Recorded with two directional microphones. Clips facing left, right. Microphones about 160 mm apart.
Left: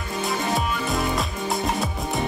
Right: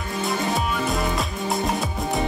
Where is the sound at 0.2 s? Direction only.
Centre (ahead or behind).